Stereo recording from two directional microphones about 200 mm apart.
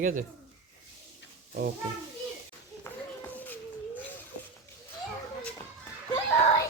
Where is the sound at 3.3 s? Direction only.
10° left (ahead or behind).